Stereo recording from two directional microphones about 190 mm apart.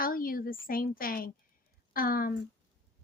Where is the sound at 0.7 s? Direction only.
50° left (ahead or behind).